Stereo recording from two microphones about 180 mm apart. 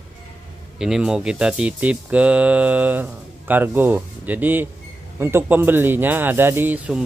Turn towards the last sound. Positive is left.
turn(degrees=-10)  # may be behind; listen again after turning